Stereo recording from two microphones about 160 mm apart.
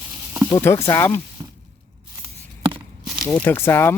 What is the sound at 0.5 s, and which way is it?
Speech, 15° left (ahead or behind).